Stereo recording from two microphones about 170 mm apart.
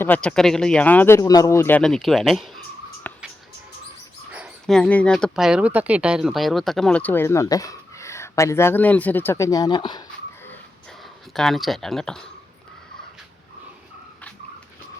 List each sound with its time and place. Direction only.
0.0 s speech: 10° left (ahead or behind)
3.1 s a sound: 10° left (ahead or behind)
4.6 s speech: 5° left (ahead or behind); by 10.0 s 25° left (ahead or behind)
11.3 s speech: centre (ahead or behind)